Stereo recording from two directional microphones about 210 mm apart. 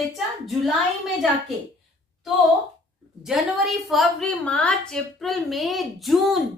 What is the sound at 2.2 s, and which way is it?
A woman's voice, centre (ahead or behind).